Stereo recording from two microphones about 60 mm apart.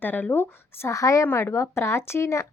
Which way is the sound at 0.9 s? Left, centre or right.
Left.